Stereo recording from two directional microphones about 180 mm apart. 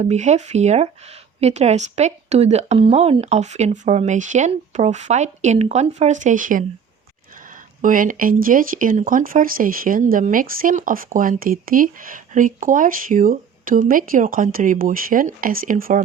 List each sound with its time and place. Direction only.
0.0 s speech: 40° right (ahead or behind)
7.8 s speech: 50° right (ahead or behind)